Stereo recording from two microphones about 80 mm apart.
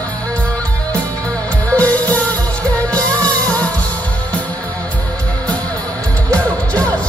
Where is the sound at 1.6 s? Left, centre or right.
Centre.